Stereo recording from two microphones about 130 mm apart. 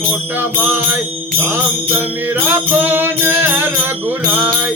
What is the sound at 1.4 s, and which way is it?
Music, 15° right (ahead or behind).